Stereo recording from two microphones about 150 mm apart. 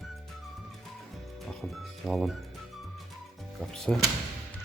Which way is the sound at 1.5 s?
Centre (ahead or behind).